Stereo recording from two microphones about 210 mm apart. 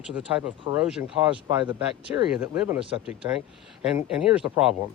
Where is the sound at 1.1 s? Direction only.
25° right (ahead or behind).